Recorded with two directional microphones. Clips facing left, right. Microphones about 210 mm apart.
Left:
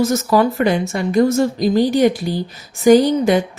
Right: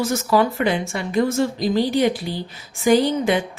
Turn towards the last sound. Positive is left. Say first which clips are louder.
# left 5 dB
turn(degrees=40)  # may be behind; listen again after turning